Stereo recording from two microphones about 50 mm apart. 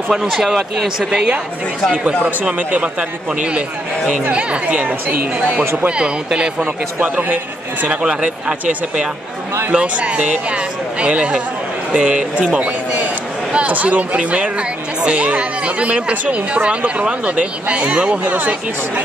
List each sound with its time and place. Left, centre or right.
0.1 s speech: centre
1.1 s speech: right
5.9 s speech: right
6.6 s speech: right
7.8 s speech: right